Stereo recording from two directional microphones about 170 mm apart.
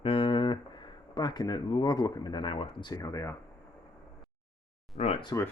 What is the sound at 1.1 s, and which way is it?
Speech, 25° left (ahead or behind).